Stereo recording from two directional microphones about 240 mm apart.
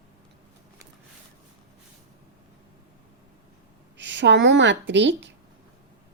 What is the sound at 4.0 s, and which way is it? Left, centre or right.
A woman's voice, right.